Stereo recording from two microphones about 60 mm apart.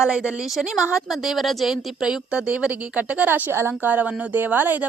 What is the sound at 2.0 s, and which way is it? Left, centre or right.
A woman's voice, centre.